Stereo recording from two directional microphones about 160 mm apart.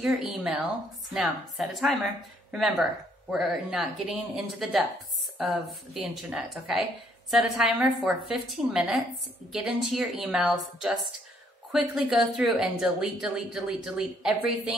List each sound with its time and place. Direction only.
0.0 s speech: 5° right (ahead or behind)
3.3 s speech: 5° right (ahead or behind)